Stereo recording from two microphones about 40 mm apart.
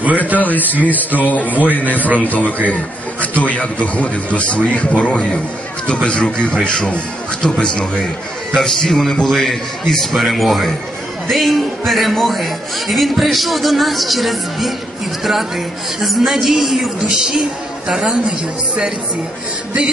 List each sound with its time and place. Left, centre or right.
0.4 s a man's voice: left
8.5 s a man's voice: centre